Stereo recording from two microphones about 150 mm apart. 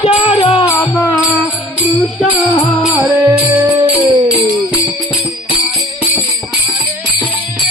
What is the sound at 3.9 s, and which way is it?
Music, 40° right (ahead or behind).